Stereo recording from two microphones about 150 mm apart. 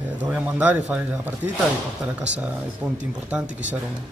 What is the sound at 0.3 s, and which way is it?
Speech, 10° right (ahead or behind).